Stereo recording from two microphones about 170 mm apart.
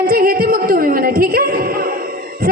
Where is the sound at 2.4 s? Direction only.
55° right (ahead or behind).